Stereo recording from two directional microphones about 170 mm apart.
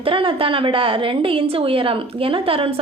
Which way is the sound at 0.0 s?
30° right (ahead or behind).